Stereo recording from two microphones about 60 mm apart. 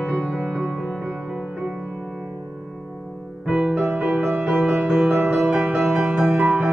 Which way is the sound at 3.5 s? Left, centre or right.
Centre.